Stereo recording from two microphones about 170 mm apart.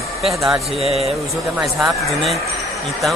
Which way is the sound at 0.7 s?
35° right (ahead or behind).